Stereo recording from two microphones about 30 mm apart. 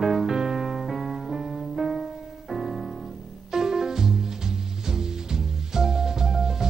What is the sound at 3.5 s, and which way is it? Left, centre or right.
Music, centre.